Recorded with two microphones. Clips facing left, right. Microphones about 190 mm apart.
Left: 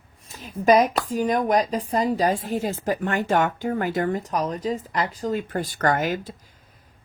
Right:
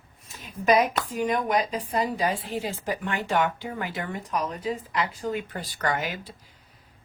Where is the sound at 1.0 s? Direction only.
35° left (ahead or behind).